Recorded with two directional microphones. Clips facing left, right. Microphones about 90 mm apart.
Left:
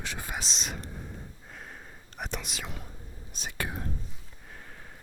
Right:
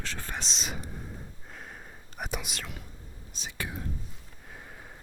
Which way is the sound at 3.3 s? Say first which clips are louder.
Left 2 dB; 50° left (ahead or behind).